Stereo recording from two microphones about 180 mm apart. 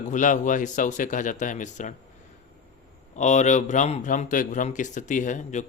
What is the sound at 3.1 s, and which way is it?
Speech, 40° left (ahead or behind).